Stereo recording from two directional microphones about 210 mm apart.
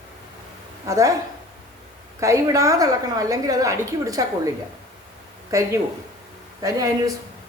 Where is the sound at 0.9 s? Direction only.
15° right (ahead or behind).